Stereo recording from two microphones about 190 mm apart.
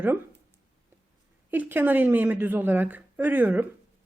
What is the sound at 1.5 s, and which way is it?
Speech, 10° right (ahead or behind).